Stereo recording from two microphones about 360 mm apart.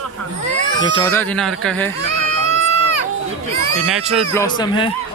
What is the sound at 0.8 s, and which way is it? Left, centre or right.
A man's voice, centre.